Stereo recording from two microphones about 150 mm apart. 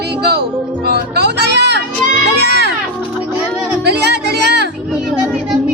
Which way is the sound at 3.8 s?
90° right.